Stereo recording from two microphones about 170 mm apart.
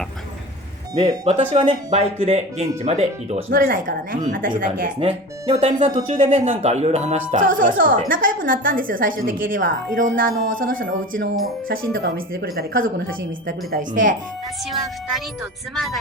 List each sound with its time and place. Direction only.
1.2 s speech: 35° right (ahead or behind)
3.5 s a woman's voice: 60° right (ahead or behind)
4.9 s speech: 40° right (ahead or behind)
7.3 s a woman's voice: 50° right (ahead or behind)
12.0 s a woman's voice: 65° right (ahead or behind)
15.7 s speech: centre (ahead or behind)